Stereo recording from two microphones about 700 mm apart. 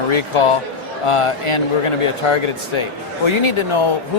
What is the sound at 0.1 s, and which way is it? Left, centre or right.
Speech, left.